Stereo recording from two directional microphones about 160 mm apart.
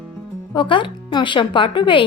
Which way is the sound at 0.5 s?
30° left (ahead or behind).